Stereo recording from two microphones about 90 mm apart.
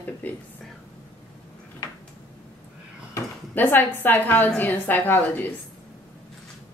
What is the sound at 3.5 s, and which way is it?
A woman's voice, 20° left (ahead or behind).